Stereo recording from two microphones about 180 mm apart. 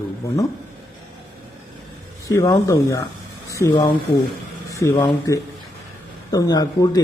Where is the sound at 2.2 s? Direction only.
20° left (ahead or behind).